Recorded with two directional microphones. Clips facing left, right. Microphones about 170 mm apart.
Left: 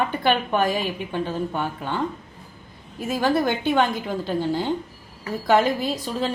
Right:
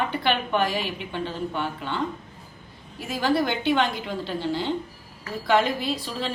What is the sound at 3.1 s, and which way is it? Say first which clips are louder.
A woman's voice: left 2 dB; 50° left (ahead or behind).